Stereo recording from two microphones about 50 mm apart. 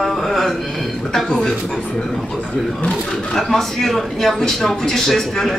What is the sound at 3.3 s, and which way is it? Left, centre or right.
A woman's voice, centre.